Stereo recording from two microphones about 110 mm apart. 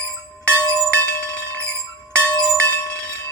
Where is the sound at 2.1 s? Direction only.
10° left (ahead or behind).